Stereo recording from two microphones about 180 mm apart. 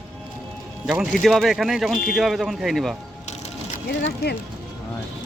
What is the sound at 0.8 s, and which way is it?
Speech, centre (ahead or behind).